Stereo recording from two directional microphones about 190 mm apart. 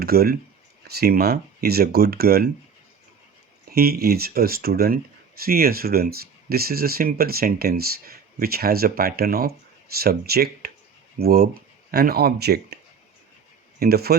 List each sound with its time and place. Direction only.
0.0 s speech: 55° right (ahead or behind)
3.7 s speech: 55° right (ahead or behind)